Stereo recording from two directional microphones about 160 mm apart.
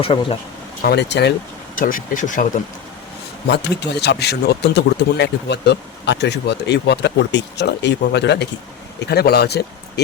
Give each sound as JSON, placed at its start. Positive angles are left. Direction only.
{"t": 0.0, "sound": "speech", "side_deg": 35}
{"t": 0.8, "sound": "speech", "side_deg": 90}
{"t": 1.7, "sound": "speech", "side_deg": 60}
{"t": 3.4, "sound": "speech", "side_deg": 90}